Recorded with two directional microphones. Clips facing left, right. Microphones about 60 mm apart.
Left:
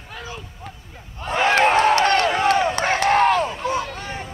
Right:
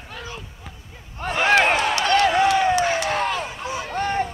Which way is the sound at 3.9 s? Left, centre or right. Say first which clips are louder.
Right 9 dB; right.